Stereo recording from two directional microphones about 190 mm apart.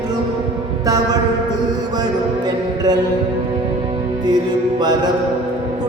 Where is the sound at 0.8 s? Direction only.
20° right (ahead or behind).